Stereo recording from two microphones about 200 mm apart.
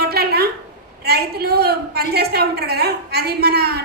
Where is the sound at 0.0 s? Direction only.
50° right (ahead or behind).